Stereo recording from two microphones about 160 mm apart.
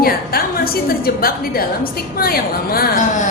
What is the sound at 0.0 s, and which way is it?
A woman's voice, 70° left (ahead or behind).